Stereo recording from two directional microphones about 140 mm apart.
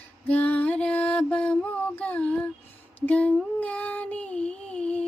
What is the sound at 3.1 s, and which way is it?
Child singing, 10° left (ahead or behind).